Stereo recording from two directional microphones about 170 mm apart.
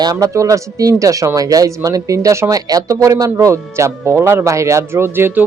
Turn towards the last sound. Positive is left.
turn(degrees=-10)  # may be behind; listen again after turning